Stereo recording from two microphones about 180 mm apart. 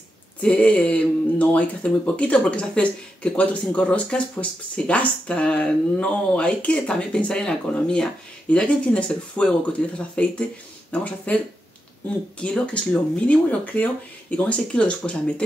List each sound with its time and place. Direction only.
0.4 s speech: 5° left (ahead or behind)
12.4 s speech: 5° left (ahead or behind)